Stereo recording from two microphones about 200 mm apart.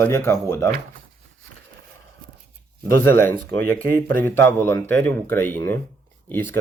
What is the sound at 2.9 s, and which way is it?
Speech, 10° left (ahead or behind).